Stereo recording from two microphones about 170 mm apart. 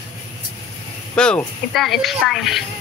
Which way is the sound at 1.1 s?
5° left (ahead or behind).